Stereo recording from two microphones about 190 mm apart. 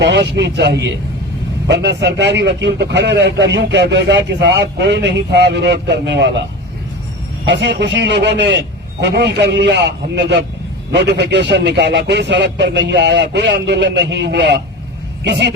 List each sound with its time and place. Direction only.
0.0 s a man's voice: 65° right (ahead or behind)
7.4 s a man's voice: 65° right (ahead or behind)